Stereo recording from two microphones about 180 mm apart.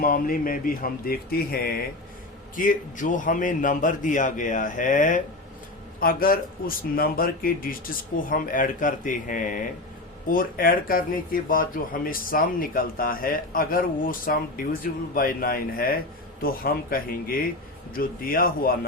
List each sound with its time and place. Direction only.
0.0 s speech: 50° left (ahead or behind)